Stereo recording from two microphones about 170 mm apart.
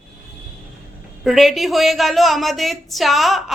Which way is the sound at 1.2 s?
Centre (ahead or behind).